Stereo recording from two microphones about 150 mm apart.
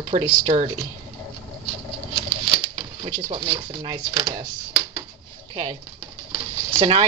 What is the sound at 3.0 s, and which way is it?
Speech, 35° right (ahead or behind).